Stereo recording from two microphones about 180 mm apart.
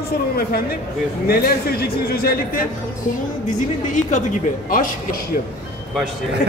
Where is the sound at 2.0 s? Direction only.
55° left (ahead or behind).